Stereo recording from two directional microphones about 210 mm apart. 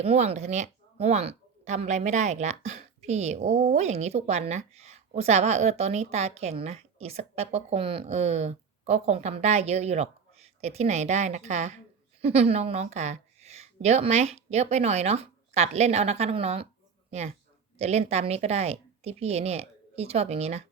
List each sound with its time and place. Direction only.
0.0 s a woman's voice: 30° right (ahead or behind)